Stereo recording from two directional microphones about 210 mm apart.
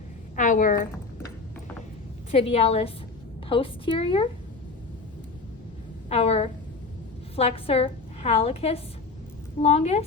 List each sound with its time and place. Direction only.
0.3 s a woman's voice: 40° left (ahead or behind)
2.3 s a woman's voice: 30° left (ahead or behind)
6.1 s a woman's voice: 30° left (ahead or behind)